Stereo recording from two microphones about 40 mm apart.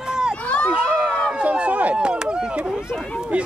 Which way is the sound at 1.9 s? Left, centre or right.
Right.